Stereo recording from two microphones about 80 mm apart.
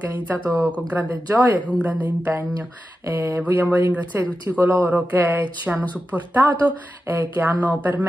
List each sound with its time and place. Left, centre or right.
0.7 s speech: centre